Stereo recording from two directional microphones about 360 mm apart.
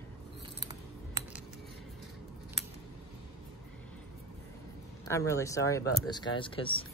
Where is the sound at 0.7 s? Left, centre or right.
Centre.